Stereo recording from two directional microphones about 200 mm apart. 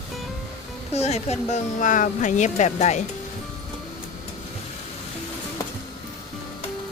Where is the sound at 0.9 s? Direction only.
35° left (ahead or behind).